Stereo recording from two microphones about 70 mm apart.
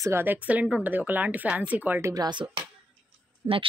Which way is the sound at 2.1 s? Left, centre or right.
Right.